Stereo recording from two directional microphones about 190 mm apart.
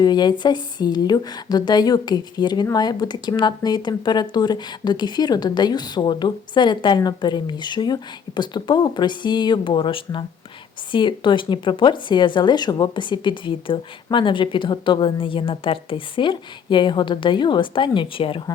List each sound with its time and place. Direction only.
0.0 s speech: 20° left (ahead or behind)